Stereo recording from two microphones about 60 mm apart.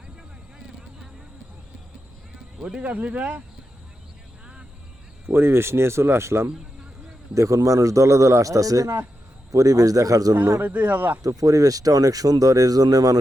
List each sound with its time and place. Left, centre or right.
2.6 s speech: centre
5.2 s speech: right
7.3 s a man's voice: right
10.6 s speech: right
11.2 s speech: right